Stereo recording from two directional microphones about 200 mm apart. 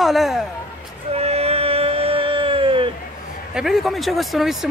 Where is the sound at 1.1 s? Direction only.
30° right (ahead or behind).